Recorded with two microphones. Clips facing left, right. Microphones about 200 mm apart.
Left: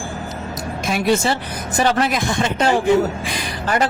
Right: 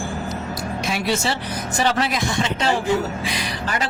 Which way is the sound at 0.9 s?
50° left (ahead or behind).